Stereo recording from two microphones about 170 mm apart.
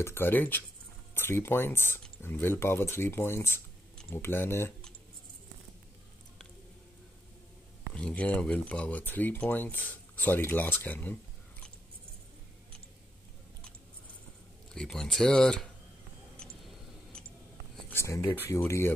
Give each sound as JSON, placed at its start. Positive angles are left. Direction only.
{"t": 0.0, "sound": "speech", "side_deg": 15}
{"t": 7.9, "sound": "speech", "side_deg": 5}
{"t": 14.7, "sound": "speech", "side_deg": 5}
{"t": 17.8, "sound": "speech", "side_deg": 15}